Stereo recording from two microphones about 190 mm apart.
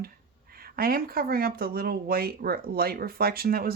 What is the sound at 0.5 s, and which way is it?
Speech, 50° right (ahead or behind).